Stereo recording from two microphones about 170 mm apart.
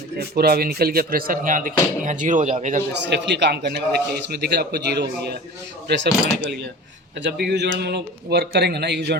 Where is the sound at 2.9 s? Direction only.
90° right; by 5.4 s 70° right (ahead or behind).